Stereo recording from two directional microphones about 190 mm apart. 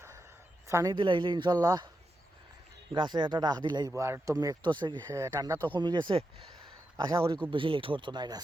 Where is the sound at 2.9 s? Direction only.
25° right (ahead or behind).